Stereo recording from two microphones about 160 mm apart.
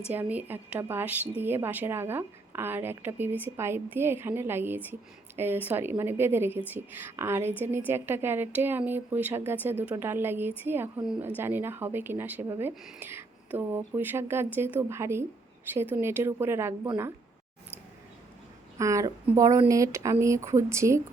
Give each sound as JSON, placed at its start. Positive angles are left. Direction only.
{"t": 0.1, "sound": "a woman's voice", "side_deg": -10}
{"t": 18.8, "sound": "speech", "side_deg": -20}